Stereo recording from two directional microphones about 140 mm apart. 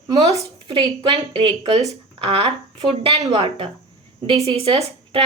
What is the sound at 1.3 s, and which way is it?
A woman's voice, 35° right (ahead or behind).